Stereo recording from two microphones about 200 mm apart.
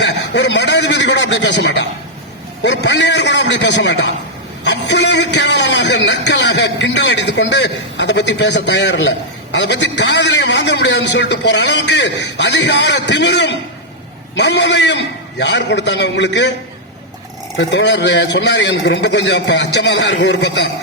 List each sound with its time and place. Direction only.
0.0 s a man's voice: 60° left (ahead or behind)
17.6 s a man's voice: 60° left (ahead or behind)